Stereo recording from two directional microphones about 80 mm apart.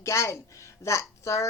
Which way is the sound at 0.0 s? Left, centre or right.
Left.